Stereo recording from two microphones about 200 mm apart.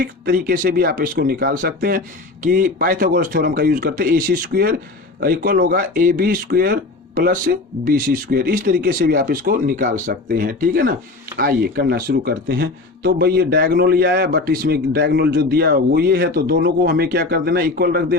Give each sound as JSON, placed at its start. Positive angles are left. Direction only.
{"t": 0.0, "sound": "speech", "side_deg": -45}